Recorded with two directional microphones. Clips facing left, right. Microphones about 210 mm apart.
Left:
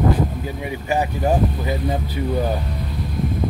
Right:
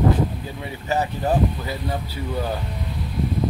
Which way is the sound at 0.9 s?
15° left (ahead or behind).